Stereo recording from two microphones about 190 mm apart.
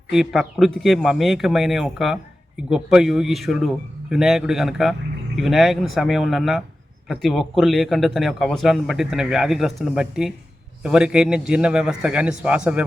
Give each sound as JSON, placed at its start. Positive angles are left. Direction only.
{"t": 0.1, "sound": "a man's voice", "side_deg": -5}